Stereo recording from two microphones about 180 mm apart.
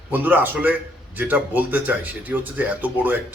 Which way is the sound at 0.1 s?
10° right (ahead or behind).